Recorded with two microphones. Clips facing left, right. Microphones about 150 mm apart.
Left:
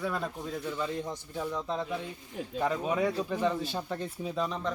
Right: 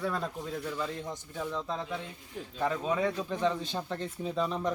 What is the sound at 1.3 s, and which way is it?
Speech, 10° left (ahead or behind).